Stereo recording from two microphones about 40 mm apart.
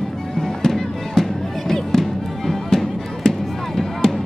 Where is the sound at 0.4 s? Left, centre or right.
Centre.